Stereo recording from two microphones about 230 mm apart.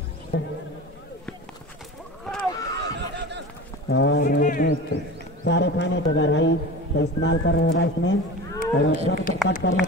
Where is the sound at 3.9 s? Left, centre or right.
Left.